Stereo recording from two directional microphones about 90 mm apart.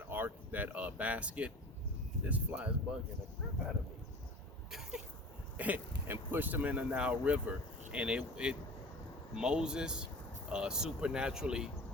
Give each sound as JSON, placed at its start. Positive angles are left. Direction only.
{"t": 0.1, "sound": "speech", "side_deg": -20}
{"t": 4.7, "sound": "a sound", "side_deg": -5}
{"t": 5.5, "sound": "speech", "side_deg": -20}